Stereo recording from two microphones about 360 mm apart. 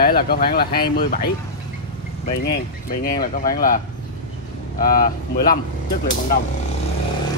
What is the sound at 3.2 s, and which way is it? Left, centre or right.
Speech, left.